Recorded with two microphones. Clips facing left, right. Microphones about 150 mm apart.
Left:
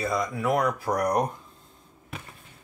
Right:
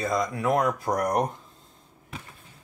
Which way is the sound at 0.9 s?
15° right (ahead or behind).